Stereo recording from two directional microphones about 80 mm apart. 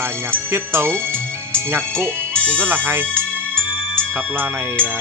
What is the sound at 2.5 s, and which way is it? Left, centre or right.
Speech, right.